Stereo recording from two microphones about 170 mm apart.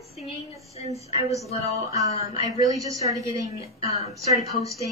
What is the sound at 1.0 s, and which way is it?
A woman's voice, 20° right (ahead or behind).